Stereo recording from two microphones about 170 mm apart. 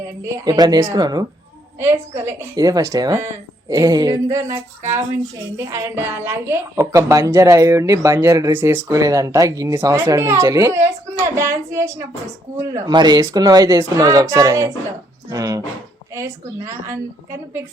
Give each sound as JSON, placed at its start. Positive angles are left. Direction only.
{"t": 0.3, "sound": "a woman's voice", "side_deg": -20}